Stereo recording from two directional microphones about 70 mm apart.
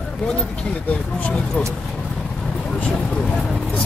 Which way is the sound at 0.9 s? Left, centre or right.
Centre.